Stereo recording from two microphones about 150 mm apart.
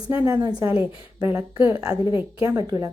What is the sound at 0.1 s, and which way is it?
A woman's voice, 15° right (ahead or behind).